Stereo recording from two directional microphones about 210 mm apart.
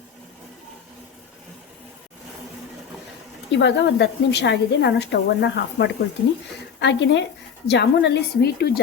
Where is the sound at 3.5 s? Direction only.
55° left (ahead or behind).